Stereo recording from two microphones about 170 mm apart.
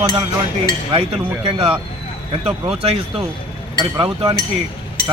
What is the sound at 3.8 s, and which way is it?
Speech, 25° right (ahead or behind).